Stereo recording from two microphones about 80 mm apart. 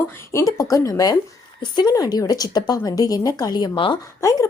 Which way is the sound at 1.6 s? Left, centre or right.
Left.